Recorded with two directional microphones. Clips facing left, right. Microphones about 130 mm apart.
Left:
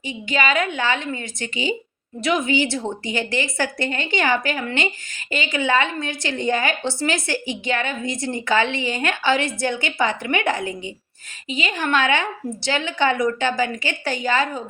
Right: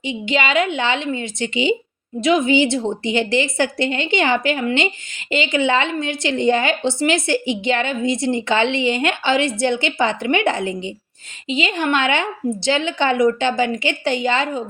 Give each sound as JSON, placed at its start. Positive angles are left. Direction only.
{"t": 0.0, "sound": "a woman's voice", "side_deg": -20}